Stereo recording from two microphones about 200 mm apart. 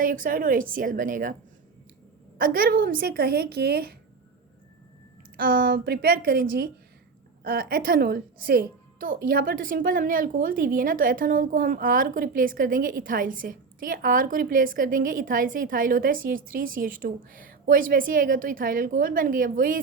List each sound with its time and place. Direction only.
0.0 s a woman's voice: 45° right (ahead or behind)
2.4 s a woman's voice: 45° right (ahead or behind)
5.4 s a woman's voice: 45° right (ahead or behind)